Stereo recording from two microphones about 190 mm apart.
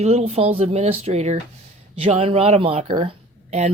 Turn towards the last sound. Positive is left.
turn(degrees=-35)  # may be behind; listen again after turning